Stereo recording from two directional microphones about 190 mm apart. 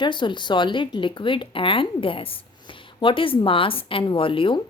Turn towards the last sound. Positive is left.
turn(degrees=25)  # may be behind; listen again after turning